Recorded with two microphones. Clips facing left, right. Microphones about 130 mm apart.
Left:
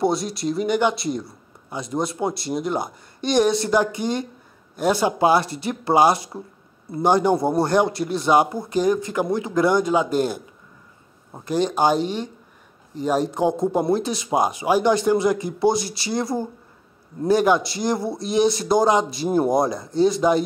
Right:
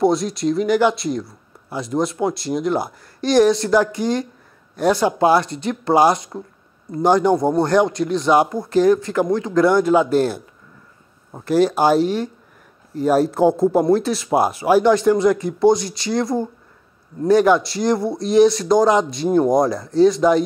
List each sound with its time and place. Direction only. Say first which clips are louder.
0.0 s speech: right 4 dB; centre (ahead or behind)
9.4 s speech: right 4 dB; 20° left (ahead or behind)
9.7 s speech: right 4 dB; 5° right (ahead or behind)